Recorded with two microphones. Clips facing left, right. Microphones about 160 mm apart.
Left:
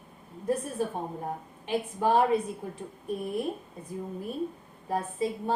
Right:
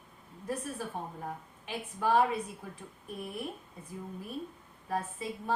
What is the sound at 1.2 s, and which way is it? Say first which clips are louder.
Speech: left 5 dB; 25° left (ahead or behind).